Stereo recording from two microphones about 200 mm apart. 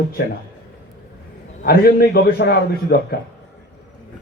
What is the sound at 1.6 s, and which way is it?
A man's voice, 50° left (ahead or behind).